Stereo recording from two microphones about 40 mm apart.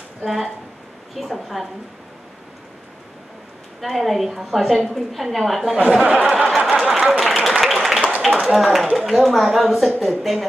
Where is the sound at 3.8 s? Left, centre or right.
Centre.